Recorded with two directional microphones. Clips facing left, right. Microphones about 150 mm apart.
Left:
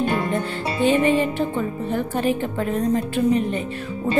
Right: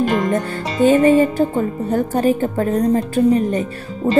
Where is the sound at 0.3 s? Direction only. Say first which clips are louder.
Right 4 dB; 40° right (ahead or behind).